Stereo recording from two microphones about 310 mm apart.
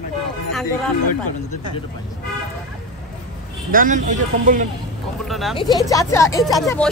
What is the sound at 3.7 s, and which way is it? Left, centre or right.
Speech, right.